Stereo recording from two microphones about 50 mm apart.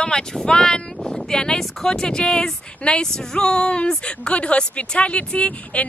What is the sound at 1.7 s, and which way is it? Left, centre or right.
Speech, centre.